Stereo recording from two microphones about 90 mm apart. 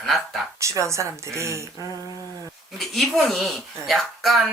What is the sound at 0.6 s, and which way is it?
Speech, 35° right (ahead or behind).